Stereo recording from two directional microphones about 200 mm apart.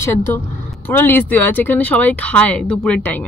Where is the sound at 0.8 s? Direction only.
10° left (ahead or behind).